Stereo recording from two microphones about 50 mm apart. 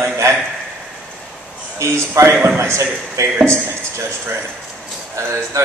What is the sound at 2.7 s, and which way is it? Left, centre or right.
A man's voice, right.